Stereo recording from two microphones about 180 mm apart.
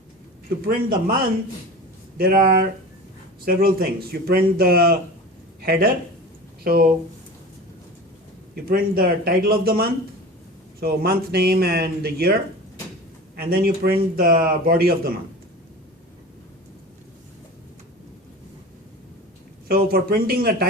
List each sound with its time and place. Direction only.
0.6 s speech: 55° right (ahead or behind)
2.1 s speech: 55° right (ahead or behind)
8.6 s speech: 55° right (ahead or behind)
19.6 s speech: 55° right (ahead or behind)